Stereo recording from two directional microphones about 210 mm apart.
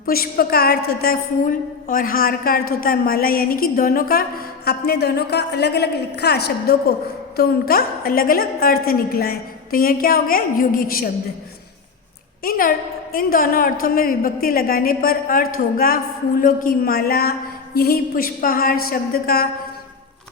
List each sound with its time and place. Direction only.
0.0 s a woman's voice: 45° left (ahead or behind)
12.4 s a woman's voice: 45° left (ahead or behind)